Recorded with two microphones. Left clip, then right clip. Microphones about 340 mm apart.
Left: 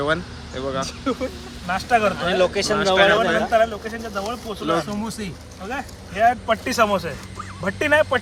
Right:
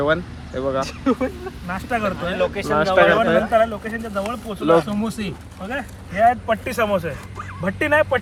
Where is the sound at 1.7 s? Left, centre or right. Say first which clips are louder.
Left 5 dB; left.